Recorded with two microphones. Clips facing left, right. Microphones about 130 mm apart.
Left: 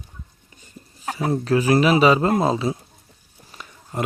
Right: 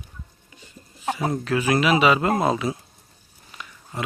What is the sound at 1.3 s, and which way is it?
A man's voice, 35° left (ahead or behind).